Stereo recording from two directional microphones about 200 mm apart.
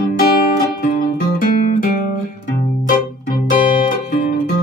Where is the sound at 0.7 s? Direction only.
50° left (ahead or behind).